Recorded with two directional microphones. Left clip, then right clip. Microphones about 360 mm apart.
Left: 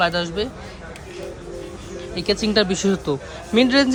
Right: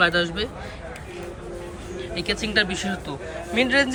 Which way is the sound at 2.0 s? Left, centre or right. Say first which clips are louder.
Left 4 dB; centre.